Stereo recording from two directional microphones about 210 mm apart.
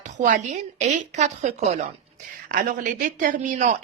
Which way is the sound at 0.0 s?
35° right (ahead or behind).